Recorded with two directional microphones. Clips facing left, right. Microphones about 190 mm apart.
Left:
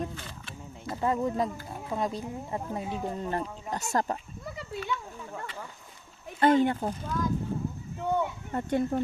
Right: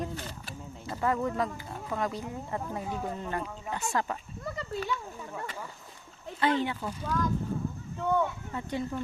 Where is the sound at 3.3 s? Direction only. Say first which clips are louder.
Left 2 dB; 40° left (ahead or behind).